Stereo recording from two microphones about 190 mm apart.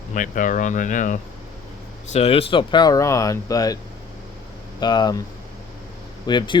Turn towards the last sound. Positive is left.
turn(degrees=25)  # may be behind; listen again after turning